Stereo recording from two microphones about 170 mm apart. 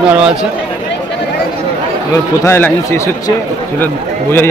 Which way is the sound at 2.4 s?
15° left (ahead or behind).